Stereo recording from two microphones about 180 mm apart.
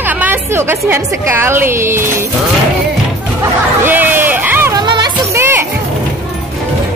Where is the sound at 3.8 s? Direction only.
10° right (ahead or behind).